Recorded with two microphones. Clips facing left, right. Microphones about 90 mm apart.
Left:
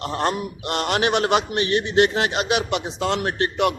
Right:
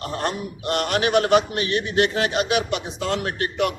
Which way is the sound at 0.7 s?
30° left (ahead or behind).